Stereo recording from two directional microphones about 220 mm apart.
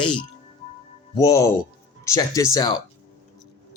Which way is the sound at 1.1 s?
15° left (ahead or behind).